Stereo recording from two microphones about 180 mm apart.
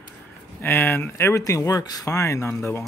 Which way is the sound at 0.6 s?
15° left (ahead or behind).